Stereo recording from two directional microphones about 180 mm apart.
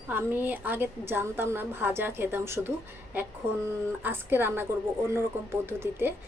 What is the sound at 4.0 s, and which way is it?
A woman's voice, 10° right (ahead or behind).